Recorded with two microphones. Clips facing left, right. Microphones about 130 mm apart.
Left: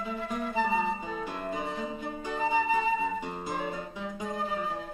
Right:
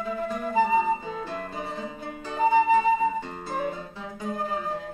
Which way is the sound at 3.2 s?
15° left (ahead or behind).